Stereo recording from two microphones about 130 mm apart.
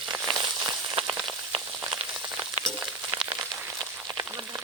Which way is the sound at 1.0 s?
45° right (ahead or behind).